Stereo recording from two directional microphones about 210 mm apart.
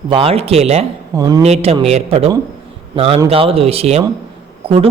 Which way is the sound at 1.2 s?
15° right (ahead or behind).